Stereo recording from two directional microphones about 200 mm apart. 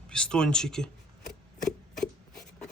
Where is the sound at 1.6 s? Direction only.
Centre (ahead or behind).